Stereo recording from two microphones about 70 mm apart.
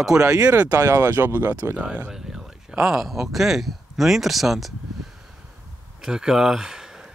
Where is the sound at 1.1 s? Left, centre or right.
Right.